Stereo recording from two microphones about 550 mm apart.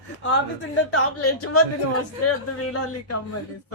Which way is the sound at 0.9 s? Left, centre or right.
Left.